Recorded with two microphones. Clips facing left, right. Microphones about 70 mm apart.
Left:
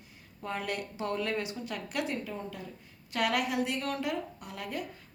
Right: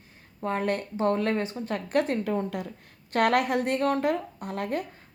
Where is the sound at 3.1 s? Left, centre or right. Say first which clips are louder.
Right 7 dB; right.